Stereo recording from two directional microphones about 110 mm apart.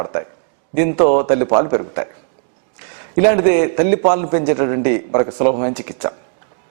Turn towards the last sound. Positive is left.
turn(degrees=-15)  # may be behind; listen again after turning